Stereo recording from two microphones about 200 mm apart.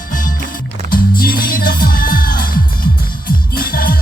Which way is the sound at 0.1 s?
40° left (ahead or behind).